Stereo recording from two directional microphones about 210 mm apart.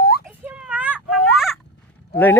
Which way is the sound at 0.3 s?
5° right (ahead or behind).